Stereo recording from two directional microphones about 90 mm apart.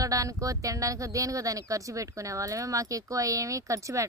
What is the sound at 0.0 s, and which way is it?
Speech, 40° right (ahead or behind).